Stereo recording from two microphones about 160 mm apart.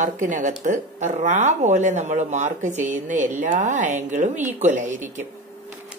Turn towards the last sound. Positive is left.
turn(degrees=-50)  # may be behind; listen again after turning